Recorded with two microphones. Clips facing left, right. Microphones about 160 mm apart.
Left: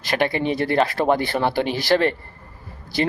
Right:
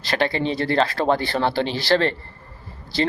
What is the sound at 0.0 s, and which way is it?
Speech, 15° left (ahead or behind).